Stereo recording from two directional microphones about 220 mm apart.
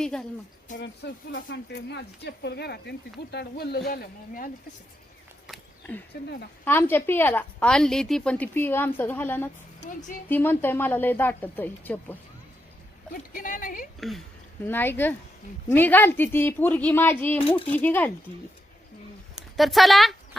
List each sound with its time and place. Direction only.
0.0 s a woman's voice: 5° left (ahead or behind)
0.8 s speech: 50° left (ahead or behind)
5.5 s a sound: 10° left (ahead or behind)
6.7 s a woman's voice: 10° left (ahead or behind)
13.3 s a woman's voice: 40° left (ahead or behind)
14.7 s a woman's voice: 10° left (ahead or behind)
19.5 s a woman's voice: centre (ahead or behind)